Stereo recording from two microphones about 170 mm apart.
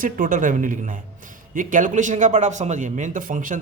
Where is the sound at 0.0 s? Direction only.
55° right (ahead or behind).